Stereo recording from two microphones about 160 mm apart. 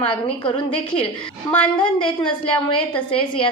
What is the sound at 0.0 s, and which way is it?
Speech, 35° left (ahead or behind).